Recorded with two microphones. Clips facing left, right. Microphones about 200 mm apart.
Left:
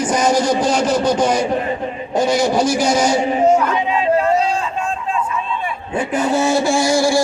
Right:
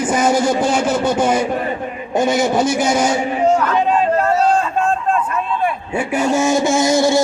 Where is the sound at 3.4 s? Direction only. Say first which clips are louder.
Even; 10° left (ahead or behind).